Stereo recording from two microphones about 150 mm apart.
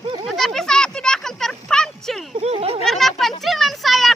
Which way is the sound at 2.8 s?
Centre (ahead or behind).